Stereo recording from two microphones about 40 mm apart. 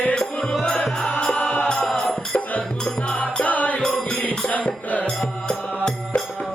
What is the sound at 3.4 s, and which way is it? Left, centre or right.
Music, left.